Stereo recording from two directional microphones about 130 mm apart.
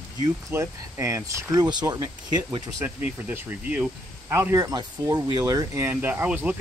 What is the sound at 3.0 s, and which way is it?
Speech, 15° right (ahead or behind).